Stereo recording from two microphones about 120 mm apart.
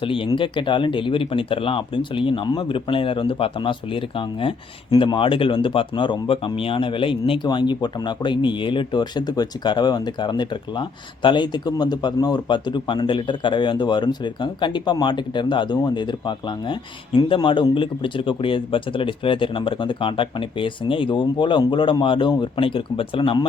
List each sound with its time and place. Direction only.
0.0 s speech: 45° left (ahead or behind)